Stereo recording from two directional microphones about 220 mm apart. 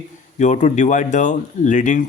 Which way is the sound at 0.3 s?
30° left (ahead or behind).